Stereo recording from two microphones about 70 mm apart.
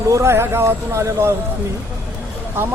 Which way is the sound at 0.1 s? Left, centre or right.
Right.